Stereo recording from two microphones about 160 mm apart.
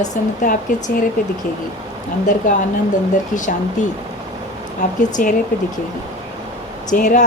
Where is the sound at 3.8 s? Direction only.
50° left (ahead or behind).